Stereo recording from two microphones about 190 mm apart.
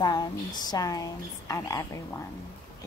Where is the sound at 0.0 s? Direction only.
20° left (ahead or behind).